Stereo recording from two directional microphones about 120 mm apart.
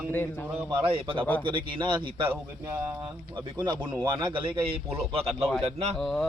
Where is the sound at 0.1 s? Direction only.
15° left (ahead or behind).